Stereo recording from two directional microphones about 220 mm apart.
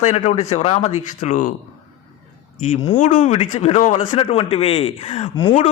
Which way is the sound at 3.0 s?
35° left (ahead or behind).